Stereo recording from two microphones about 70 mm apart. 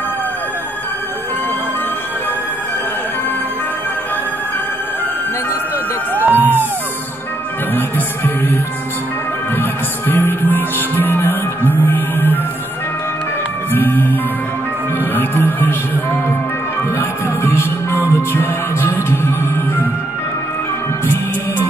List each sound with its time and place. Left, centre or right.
6.1 s music: right
7.7 s music: left
9.6 s music: left
13.7 s music: left
17.4 s music: left